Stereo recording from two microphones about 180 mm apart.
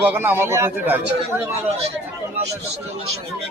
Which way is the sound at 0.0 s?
10° right (ahead or behind).